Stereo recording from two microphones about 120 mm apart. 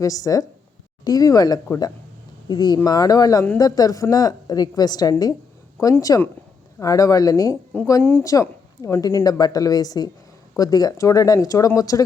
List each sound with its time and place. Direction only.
0.0 s a woman's voice: 30° left (ahead or behind)
7.7 s speech: 10° left (ahead or behind)
8.2 s a woman's voice: 30° left (ahead or behind)